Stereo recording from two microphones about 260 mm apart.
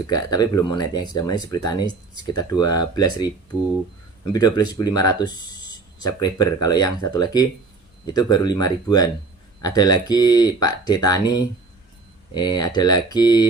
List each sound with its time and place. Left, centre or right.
0.1 s speech: centre
4.3 s speech: centre